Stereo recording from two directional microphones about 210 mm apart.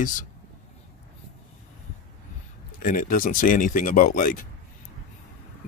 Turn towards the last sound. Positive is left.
turn(degrees=40)  # may be behind; listen again after turning